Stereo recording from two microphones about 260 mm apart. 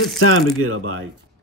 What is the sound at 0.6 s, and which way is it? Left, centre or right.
Speech, right.